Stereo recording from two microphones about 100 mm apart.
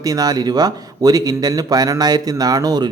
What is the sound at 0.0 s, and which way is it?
A man's voice, 40° right (ahead or behind).